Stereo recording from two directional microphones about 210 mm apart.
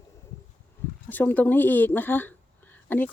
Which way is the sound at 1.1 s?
10° left (ahead or behind).